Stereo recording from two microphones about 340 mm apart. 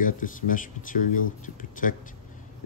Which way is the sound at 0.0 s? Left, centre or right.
Left.